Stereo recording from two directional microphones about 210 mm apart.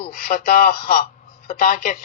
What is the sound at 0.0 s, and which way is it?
Speech, 45° left (ahead or behind).